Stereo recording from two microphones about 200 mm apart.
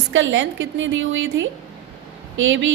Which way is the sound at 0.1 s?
70° right (ahead or behind).